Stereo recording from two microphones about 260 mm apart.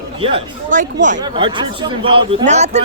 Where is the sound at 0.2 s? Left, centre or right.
Right.